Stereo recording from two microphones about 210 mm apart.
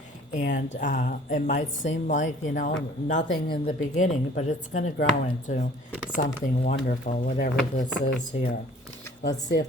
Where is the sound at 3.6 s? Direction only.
35° left (ahead or behind).